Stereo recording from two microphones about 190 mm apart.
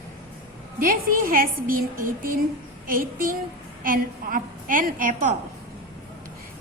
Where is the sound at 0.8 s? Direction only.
50° right (ahead or behind).